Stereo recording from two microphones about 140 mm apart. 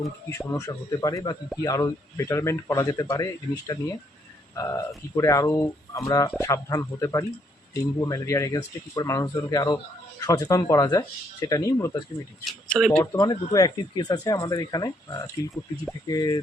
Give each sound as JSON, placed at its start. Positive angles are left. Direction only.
{"t": 0.3, "sound": "speech", "side_deg": 20}
{"t": 12.5, "sound": "speech", "side_deg": 5}
{"t": 13.0, "sound": "speech", "side_deg": 30}